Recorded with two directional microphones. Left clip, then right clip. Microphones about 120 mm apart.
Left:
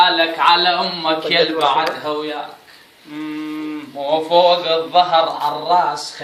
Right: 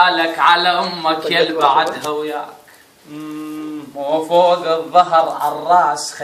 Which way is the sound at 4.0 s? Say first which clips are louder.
Even; 20° left (ahead or behind).